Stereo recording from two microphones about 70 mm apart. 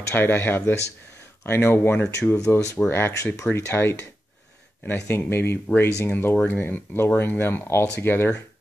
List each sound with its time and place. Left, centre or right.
0.1 s speech: left